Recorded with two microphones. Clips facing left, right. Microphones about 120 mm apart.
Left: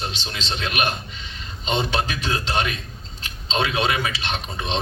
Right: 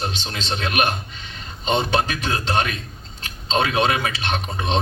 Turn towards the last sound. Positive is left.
turn(degrees=-50)  # may be behind; listen again after turning